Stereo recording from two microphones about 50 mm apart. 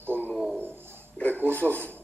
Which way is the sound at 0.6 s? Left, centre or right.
Right.